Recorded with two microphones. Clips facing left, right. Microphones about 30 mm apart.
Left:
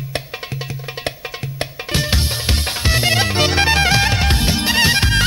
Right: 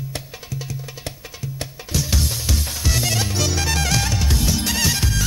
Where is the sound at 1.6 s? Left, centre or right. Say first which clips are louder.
Left 6 dB; left.